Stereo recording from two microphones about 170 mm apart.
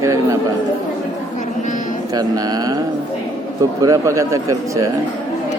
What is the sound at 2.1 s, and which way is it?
Speech, 25° right (ahead or behind).